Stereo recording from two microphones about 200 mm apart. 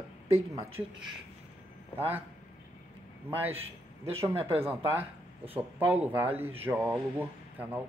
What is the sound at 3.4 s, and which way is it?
Speech, 10° right (ahead or behind).